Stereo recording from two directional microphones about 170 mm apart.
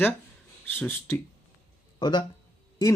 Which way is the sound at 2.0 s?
25° left (ahead or behind).